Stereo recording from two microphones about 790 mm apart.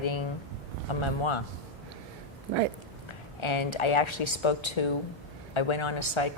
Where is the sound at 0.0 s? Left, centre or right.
Left.